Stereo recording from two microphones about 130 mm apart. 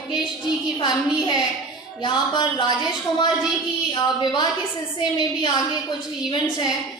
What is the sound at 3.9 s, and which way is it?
Speech, 35° left (ahead or behind).